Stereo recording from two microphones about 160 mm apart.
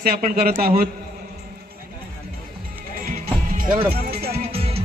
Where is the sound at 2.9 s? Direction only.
60° right (ahead or behind).